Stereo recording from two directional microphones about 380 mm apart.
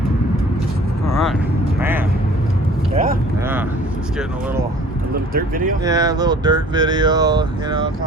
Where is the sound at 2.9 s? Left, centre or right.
Right.